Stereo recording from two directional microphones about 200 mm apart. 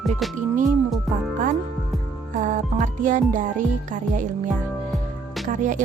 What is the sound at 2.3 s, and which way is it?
Music, 40° right (ahead or behind).